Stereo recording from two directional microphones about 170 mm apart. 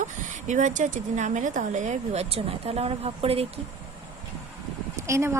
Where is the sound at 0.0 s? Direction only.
45° right (ahead or behind).